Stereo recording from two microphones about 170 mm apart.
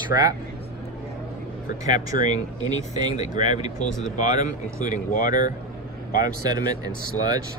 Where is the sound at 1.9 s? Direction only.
50° left (ahead or behind).